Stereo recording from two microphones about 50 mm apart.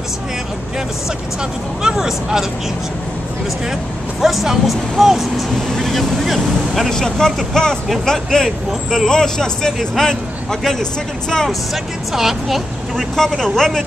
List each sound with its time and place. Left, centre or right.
1.8 s speech: centre
4.2 s speech: centre
6.9 s a man's voice: centre
11.4 s a man's voice: centre